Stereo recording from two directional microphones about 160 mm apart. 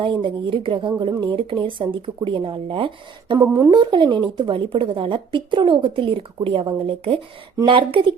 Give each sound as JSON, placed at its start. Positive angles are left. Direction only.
{"t": 0.0, "sound": "a woman's voice", "side_deg": -30}
{"t": 3.3, "sound": "a woman's voice", "side_deg": -20}